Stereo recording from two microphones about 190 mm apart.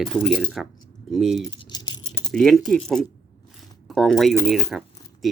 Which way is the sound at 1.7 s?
20° left (ahead or behind).